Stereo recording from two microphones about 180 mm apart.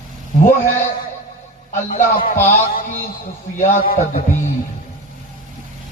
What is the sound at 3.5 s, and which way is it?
Speech, 50° left (ahead or behind).